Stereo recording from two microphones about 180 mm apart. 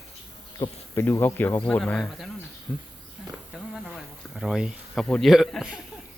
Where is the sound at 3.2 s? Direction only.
5° right (ahead or behind).